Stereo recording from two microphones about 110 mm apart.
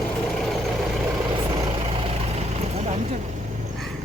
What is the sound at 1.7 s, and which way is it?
Vehicle, 55° right (ahead or behind).